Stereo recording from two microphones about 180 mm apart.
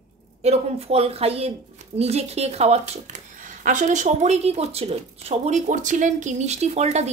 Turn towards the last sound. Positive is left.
turn(degrees=-40)  # may be behind; listen again after turning